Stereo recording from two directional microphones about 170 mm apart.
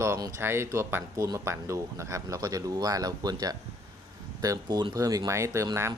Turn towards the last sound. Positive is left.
turn(degrees=-15)  # may be behind; listen again after turning